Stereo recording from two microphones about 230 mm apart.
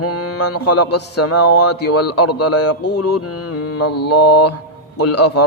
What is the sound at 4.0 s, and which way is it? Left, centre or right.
Speech, left.